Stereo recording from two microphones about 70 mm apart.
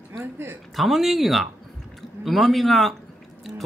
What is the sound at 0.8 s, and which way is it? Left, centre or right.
Speech, centre.